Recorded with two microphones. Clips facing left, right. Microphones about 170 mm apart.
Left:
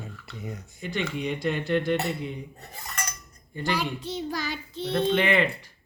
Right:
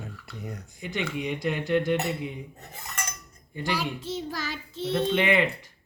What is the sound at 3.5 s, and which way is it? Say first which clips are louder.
A child's voice: left 1 dB; 10° right (ahead or behind).